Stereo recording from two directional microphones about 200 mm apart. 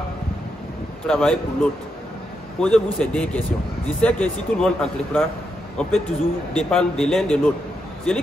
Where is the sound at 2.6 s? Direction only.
5° left (ahead or behind).